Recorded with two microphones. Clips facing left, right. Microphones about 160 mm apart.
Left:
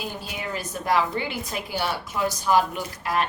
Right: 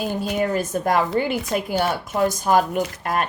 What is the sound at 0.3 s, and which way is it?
Speech, 45° right (ahead or behind).